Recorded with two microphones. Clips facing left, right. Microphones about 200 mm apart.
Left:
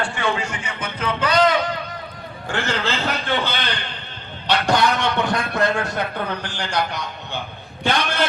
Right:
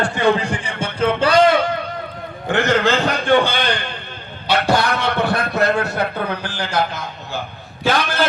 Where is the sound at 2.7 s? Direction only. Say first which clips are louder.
Right 6 dB; 50° right (ahead or behind).